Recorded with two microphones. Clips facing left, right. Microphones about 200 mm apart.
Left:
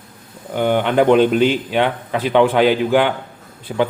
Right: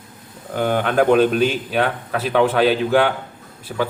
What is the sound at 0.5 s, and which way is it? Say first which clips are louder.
A man's voice: left 2 dB; 20° left (ahead or behind).